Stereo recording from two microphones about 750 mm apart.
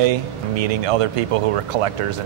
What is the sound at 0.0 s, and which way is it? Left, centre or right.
Speech, right.